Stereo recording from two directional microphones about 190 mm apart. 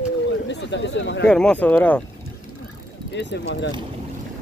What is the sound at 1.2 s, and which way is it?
Speech, 5° left (ahead or behind).